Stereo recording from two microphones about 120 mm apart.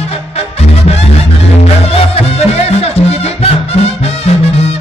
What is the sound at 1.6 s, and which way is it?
Music, 55° left (ahead or behind).